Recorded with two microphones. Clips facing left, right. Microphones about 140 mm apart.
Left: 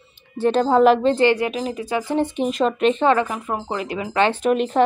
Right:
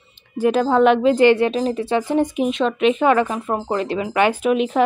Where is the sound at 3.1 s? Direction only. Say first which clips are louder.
Right 2 dB; 20° right (ahead or behind); by 4.8 s 5° right (ahead or behind).